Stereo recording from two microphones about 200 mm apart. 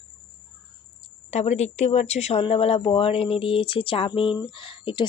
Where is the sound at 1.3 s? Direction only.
35° left (ahead or behind).